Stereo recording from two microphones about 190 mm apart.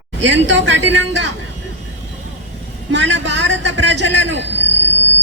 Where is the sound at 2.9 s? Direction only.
70° right (ahead or behind).